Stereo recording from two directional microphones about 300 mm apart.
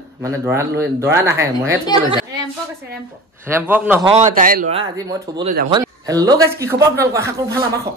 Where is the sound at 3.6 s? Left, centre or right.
Centre.